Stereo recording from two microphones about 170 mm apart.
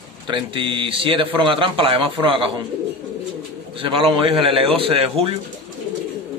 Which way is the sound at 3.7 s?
30° right (ahead or behind).